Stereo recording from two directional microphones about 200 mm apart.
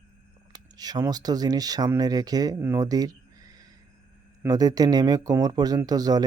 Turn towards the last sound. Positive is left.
turn(degrees=-20)  # may be behind; listen again after turning